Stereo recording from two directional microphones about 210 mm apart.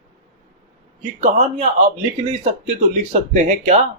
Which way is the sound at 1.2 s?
35° right (ahead or behind).